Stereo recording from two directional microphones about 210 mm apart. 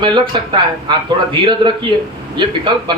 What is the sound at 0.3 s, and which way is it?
Speech, 25° right (ahead or behind).